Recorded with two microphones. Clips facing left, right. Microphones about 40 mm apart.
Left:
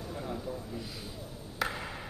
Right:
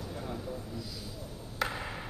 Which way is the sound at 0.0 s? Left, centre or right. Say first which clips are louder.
Left 1 dB; centre.